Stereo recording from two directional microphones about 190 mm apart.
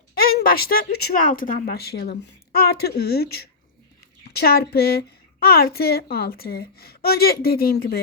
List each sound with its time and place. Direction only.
0.2 s a woman's voice: 50° left (ahead or behind)